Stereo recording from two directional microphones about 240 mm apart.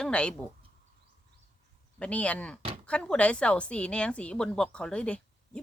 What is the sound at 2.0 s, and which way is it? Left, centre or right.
Speech, centre.